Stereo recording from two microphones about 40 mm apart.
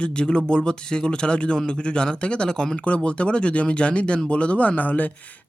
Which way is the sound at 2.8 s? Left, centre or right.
Left.